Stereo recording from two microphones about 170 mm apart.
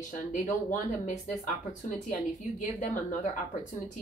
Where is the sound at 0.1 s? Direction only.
50° left (ahead or behind).